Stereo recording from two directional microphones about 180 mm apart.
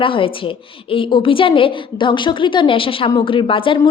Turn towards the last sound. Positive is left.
turn(degrees=30)  # may be behind; listen again after turning